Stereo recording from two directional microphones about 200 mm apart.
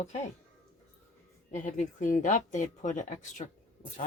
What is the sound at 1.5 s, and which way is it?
Speech, 40° left (ahead or behind).